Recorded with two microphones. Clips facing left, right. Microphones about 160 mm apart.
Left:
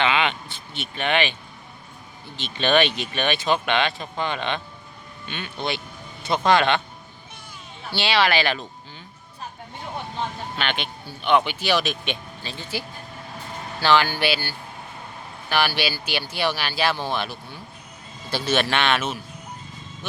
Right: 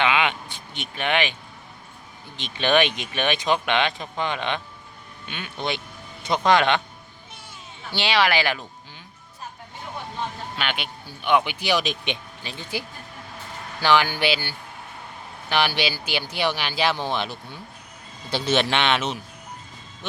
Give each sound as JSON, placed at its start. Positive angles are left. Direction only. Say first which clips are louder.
{"t": 0.0, "sound": "speech", "louder": "even", "side_deg": -10}
{"t": 2.4, "sound": "speech", "louder": "even", "side_deg": -10}
{"t": 7.9, "sound": "speech", "louder": "even", "side_deg": -15}
{"t": 10.6, "sound": "speech", "louder": "left 2 dB", "side_deg": -10}
{"t": 13.8, "sound": "speech", "louder": "even", "side_deg": -15}